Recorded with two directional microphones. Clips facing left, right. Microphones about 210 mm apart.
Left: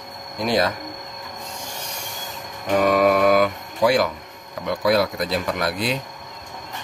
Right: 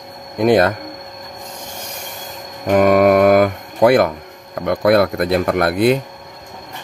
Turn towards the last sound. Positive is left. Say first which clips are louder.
# right 9 dB
turn(degrees=-55)  # may be behind; listen again after turning